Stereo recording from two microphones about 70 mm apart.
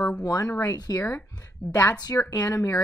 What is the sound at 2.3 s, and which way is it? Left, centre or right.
Speech, left.